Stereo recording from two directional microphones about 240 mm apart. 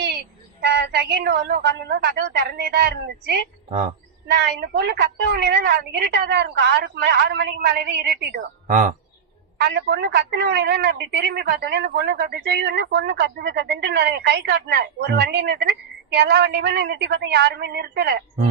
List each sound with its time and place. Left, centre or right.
0.6 s a woman's voice: right
8.6 s speech: right
9.6 s a woman's voice: right